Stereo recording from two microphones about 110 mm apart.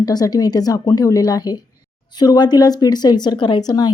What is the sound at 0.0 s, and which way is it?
A woman's voice, 35° left (ahead or behind).